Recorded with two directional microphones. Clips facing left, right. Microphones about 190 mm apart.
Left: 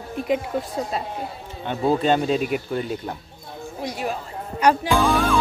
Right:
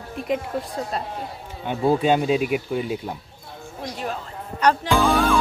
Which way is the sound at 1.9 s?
10° right (ahead or behind).